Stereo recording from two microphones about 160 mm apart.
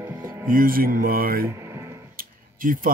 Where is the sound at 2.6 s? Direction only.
60° right (ahead or behind).